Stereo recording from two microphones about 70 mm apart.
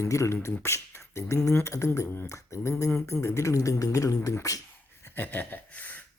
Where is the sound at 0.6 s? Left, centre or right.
Left.